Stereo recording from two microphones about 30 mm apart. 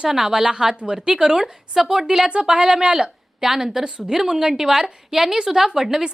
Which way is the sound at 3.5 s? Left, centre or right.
Centre.